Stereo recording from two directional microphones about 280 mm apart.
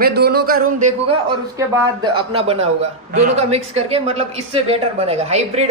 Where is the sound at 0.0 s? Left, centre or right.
Right.